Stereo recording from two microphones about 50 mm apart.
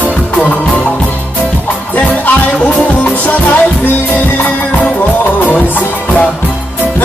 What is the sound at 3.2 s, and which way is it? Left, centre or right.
Music, left.